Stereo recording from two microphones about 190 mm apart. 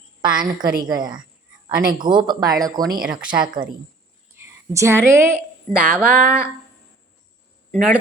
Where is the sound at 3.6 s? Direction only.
50° right (ahead or behind).